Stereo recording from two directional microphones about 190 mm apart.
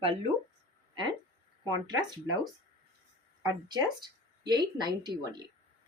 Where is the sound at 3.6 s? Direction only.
20° right (ahead or behind).